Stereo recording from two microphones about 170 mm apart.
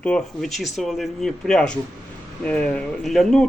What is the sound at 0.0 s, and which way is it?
Speech, 5° left (ahead or behind).